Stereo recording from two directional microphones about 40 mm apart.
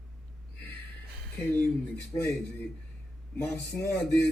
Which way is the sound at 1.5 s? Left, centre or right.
Left.